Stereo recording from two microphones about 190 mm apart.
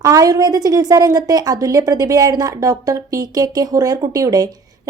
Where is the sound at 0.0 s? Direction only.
20° right (ahead or behind).